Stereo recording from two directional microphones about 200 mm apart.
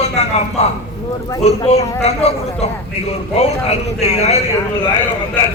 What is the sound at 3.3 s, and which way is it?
A man's voice, 30° left (ahead or behind).